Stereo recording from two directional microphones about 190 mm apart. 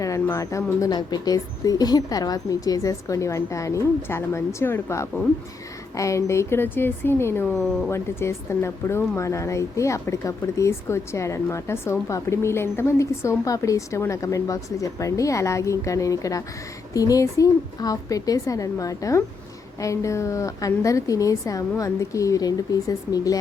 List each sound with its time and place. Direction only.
0.0 s speech: 15° left (ahead or behind)